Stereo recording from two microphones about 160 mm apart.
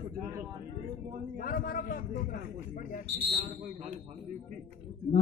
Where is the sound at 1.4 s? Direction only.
60° left (ahead or behind).